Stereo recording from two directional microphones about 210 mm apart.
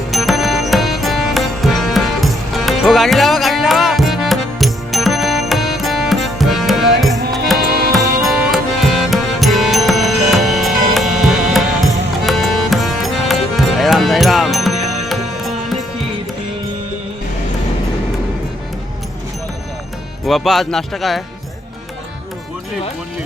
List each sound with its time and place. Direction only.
0.1 s music: centre (ahead or behind)
7.2 s music: 50° right (ahead or behind)
7.9 s music: centre (ahead or behind)
20.2 s speech: centre (ahead or behind)